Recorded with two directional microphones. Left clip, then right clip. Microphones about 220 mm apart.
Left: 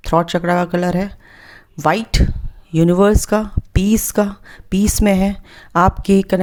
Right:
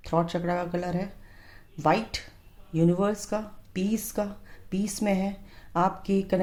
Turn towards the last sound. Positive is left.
turn(degrees=35)  # may be behind; listen again after turning